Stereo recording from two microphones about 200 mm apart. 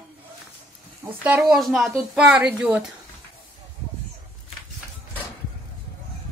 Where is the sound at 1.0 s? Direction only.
10° right (ahead or behind).